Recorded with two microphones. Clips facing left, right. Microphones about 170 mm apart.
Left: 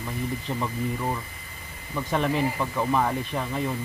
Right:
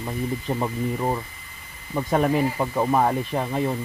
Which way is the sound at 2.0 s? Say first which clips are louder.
Right 4 dB; 40° right (ahead or behind).